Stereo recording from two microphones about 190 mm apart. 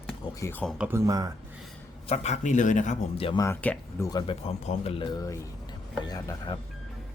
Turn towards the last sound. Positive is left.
turn(degrees=20)  # may be behind; listen again after turning